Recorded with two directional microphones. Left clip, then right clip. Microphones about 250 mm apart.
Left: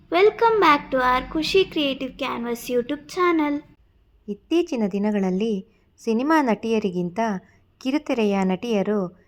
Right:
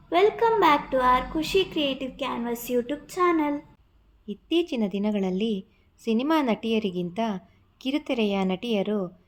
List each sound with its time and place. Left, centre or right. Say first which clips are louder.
0.1 s a woman's voice: left 4 dB; centre